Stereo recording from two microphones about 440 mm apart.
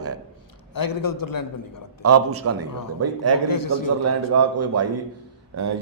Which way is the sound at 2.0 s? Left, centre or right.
Right.